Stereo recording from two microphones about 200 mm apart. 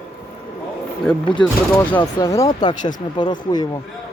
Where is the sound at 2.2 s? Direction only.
15° left (ahead or behind).